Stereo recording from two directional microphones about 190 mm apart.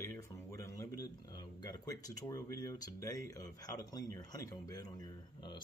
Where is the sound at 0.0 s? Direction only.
15° left (ahead or behind).